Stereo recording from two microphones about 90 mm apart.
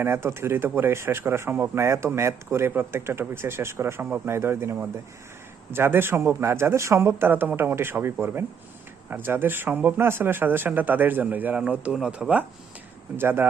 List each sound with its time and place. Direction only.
0.0 s speech: 30° right (ahead or behind)
13.1 s speech: 25° right (ahead or behind)